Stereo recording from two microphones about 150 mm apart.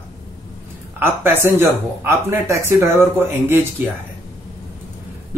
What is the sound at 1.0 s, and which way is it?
Speech, 15° right (ahead or behind).